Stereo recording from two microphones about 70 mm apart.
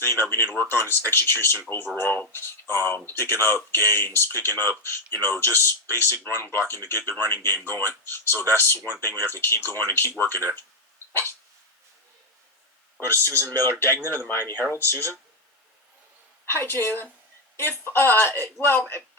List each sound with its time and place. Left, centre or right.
0.0 s speech: left
11.1 s hiccup: left
13.1 s speech: left
16.5 s speech: left